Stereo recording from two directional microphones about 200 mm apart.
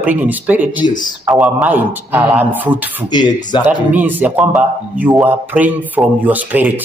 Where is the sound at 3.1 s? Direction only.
20° left (ahead or behind).